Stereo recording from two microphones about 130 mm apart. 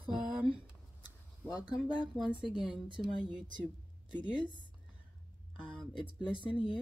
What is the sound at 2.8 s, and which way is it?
Speech, 40° right (ahead or behind).